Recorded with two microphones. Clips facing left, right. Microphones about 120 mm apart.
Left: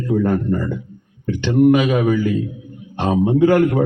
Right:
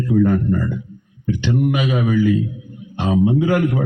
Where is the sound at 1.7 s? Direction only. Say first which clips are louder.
Left 3 dB; 55° left (ahead or behind).